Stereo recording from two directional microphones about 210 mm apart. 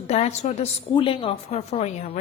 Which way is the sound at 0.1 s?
30° left (ahead or behind).